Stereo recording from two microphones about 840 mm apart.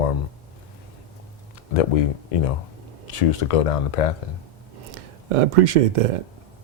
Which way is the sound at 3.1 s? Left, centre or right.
Left.